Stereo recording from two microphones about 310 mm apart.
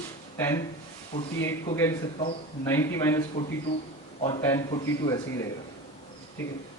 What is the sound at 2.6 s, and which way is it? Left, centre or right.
Speech, centre.